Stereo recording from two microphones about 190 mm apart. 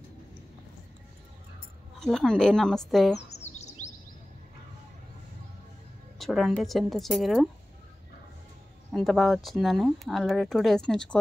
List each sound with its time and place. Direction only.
2.0 s speech: centre (ahead or behind)
3.5 s chirp: 35° left (ahead or behind)
6.1 s speech: centre (ahead or behind)
8.9 s speech: centre (ahead or behind)